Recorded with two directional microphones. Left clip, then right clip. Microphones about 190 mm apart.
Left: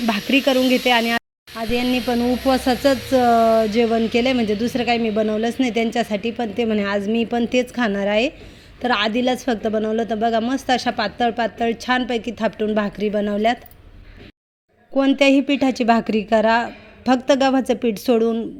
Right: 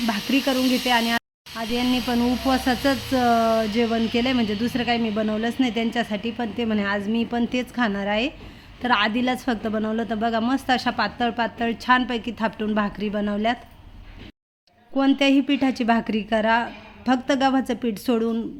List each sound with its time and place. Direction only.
0.0 s a woman's voice: 15° left (ahead or behind)
8.8 s speech: 10° left (ahead or behind)
15.2 s a woman's voice: 20° left (ahead or behind)